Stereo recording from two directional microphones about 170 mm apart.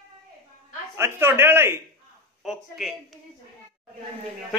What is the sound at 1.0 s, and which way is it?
Speech, 15° right (ahead or behind).